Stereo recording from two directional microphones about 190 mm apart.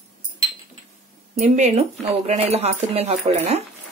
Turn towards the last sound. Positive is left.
turn(degrees=-35)  # may be behind; listen again after turning